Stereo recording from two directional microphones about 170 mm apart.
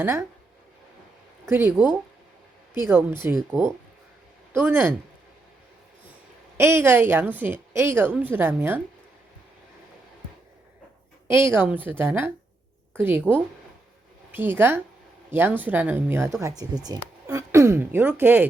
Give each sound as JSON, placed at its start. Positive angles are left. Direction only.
{"t": 0.0, "sound": "a woman's voice", "side_deg": -15}
{"t": 1.5, "sound": "a woman's voice", "side_deg": -15}
{"t": 6.6, "sound": "a woman's voice", "side_deg": -15}
{"t": 11.3, "sound": "a woman's voice", "side_deg": -15}